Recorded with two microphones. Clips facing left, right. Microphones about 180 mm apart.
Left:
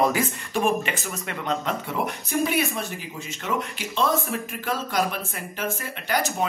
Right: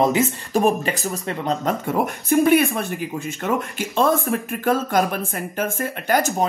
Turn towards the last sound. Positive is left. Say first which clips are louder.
# right 5 dB
turn(degrees=-45)  # may be behind; listen again after turning